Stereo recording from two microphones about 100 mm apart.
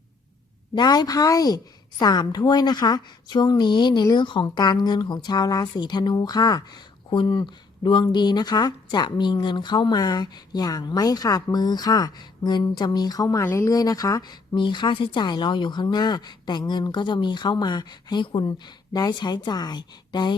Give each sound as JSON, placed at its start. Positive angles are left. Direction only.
{"t": 0.8, "sound": "speech", "side_deg": 40}
{"t": 7.1, "sound": "speech", "side_deg": 55}
{"t": 13.4, "sound": "speech", "side_deg": 20}
{"t": 13.7, "sound": "speech", "side_deg": 35}
{"t": 18.9, "sound": "speech", "side_deg": 45}